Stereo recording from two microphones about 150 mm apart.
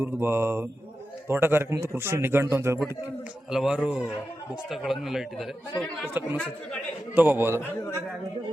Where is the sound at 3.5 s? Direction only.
5° right (ahead or behind).